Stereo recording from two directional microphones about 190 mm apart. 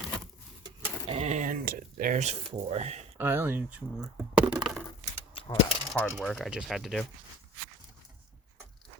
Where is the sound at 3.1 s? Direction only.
10° right (ahead or behind).